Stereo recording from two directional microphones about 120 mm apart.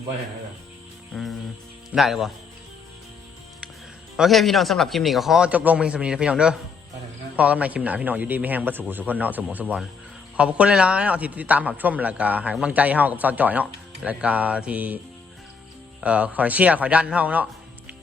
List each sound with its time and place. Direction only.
1.1 s a man's voice: centre (ahead or behind)
4.2 s a man's voice: centre (ahead or behind)
16.0 s a man's voice: 10° right (ahead or behind)